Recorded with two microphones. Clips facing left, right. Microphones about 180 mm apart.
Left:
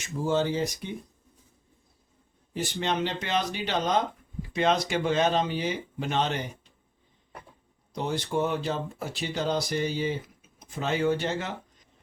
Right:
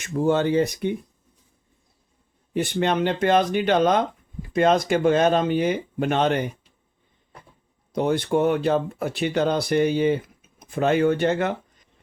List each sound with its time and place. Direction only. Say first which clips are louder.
0.0 s speech: right 6 dB; 60° right (ahead or behind)
2.5 s speech: right 7 dB; 60° right (ahead or behind)
7.9 s speech: right 7 dB; 60° right (ahead or behind)